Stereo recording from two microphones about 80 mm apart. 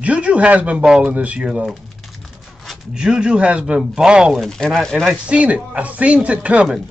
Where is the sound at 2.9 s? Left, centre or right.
Centre.